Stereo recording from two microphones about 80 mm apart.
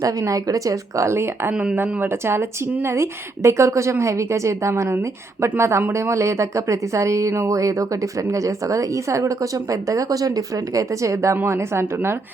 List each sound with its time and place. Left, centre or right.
0.0 s a woman's voice: right